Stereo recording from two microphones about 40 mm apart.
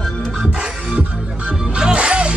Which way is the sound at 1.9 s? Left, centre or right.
Right.